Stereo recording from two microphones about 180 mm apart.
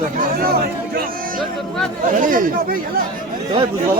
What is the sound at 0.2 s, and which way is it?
Chatter, 55° right (ahead or behind).